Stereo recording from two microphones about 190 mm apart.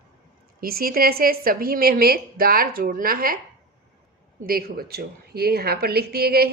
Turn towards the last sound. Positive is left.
turn(degrees=-55)  # may be behind; listen again after turning